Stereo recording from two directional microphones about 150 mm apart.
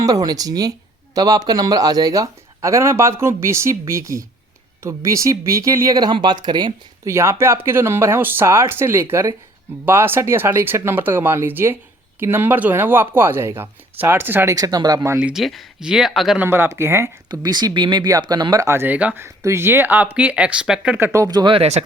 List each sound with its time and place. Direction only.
0.0 s speech: 25° right (ahead or behind)
7.1 s speech: 15° right (ahead or behind)
15.2 s speech: 5° right (ahead or behind)
16.4 s speech: 15° right (ahead or behind)
17.2 s speech: 25° right (ahead or behind); by 21.1 s 5° right (ahead or behind)
21.1 s speech: 25° right (ahead or behind); by 21.8 s 45° right (ahead or behind)